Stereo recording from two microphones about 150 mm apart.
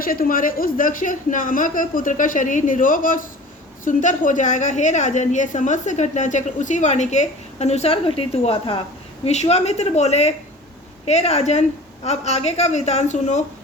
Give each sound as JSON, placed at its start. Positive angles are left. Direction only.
{"t": 0.0, "sound": "a woman's voice", "side_deg": 75}